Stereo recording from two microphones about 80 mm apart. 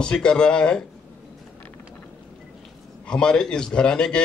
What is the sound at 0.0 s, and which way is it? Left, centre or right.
Speech, centre.